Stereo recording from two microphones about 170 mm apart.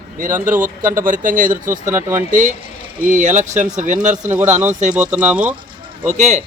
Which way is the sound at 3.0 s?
50° right (ahead or behind).